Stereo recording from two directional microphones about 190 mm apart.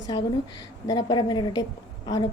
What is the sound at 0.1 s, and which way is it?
A woman's voice, 25° left (ahead or behind).